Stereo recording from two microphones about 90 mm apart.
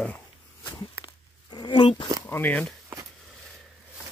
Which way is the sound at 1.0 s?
55° left (ahead or behind).